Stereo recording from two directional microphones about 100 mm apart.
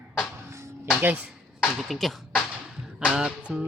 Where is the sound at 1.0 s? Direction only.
15° right (ahead or behind).